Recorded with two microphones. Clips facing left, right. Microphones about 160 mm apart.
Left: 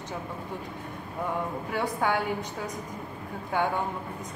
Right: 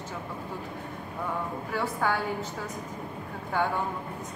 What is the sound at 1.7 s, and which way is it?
Speech, 15° left (ahead or behind).